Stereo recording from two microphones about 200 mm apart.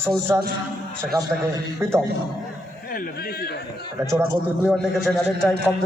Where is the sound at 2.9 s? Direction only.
45° left (ahead or behind).